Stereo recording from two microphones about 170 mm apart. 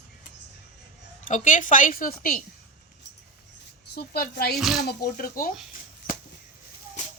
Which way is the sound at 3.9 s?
65° left (ahead or behind).